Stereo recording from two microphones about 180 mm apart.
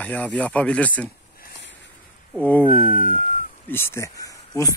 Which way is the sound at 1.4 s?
75° left (ahead or behind).